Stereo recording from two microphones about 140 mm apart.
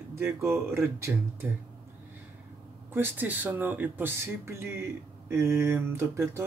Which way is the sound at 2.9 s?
15° right (ahead or behind).